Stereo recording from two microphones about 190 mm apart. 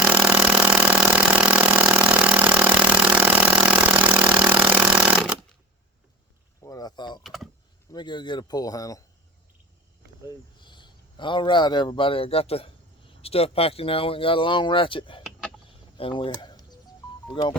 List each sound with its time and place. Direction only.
0.0 s vehicle: 5° right (ahead or behind)
6.7 s a sound: 20° left (ahead or behind)
7.2 s vehicle: centre (ahead or behind)
7.9 s speech: 25° left (ahead or behind)
10.2 s a man's voice: 25° left (ahead or behind)
16.4 s a sound: 20° left (ahead or behind)